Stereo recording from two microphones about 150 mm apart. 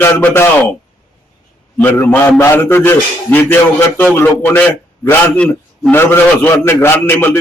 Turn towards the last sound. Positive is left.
turn(degrees=15)  # may be behind; listen again after turning